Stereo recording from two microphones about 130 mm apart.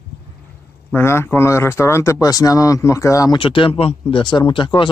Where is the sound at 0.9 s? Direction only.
20° left (ahead or behind).